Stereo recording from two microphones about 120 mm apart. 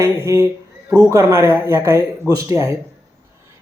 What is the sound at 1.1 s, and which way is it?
Speech, 20° right (ahead or behind).